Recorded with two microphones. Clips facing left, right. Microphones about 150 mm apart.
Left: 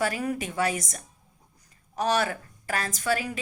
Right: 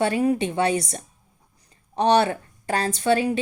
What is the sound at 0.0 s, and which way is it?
A woman's voice, 25° right (ahead or behind).